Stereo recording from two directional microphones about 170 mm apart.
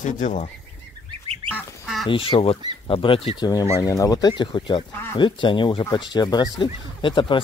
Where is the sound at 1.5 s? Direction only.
Centre (ahead or behind).